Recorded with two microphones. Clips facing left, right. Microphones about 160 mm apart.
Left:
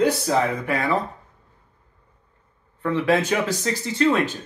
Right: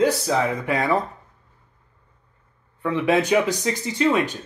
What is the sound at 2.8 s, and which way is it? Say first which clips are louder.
Speech: even; 15° right (ahead or behind).